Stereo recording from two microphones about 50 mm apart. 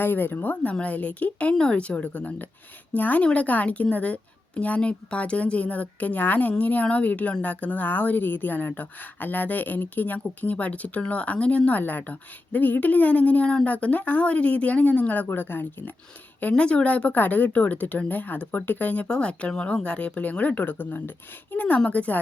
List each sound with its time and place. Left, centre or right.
0.0 s a woman's voice: left
16.4 s speech: left
19.0 s a woman's voice: centre